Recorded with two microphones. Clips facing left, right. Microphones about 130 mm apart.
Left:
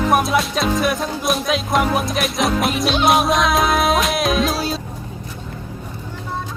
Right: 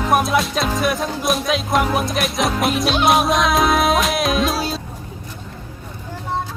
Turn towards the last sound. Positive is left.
turn(degrees=0)  # may be behind; listen again after turning